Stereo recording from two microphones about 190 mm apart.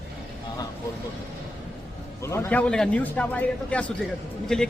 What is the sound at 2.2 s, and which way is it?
A man's voice, 15° left (ahead or behind).